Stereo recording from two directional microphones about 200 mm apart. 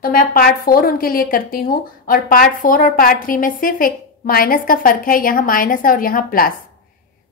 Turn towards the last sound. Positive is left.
turn(degrees=45)  # may be behind; listen again after turning